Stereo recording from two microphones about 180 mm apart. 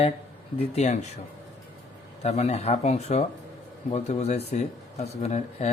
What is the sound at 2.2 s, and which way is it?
Speech, 35° left (ahead or behind).